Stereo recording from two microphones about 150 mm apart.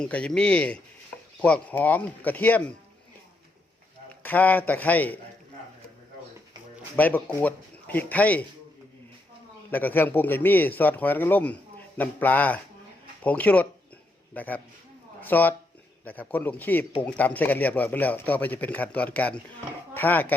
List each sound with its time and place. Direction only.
0.0 s a man's voice: 5° left (ahead or behind)
4.2 s a man's voice: 10° left (ahead or behind)
6.9 s a man's voice: 10° left (ahead or behind)
9.7 s a man's voice: 10° left (ahead or behind)